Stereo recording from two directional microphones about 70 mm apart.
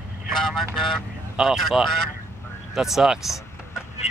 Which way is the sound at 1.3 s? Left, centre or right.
Centre.